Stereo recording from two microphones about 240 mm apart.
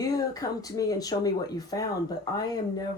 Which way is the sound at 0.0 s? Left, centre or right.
Centre.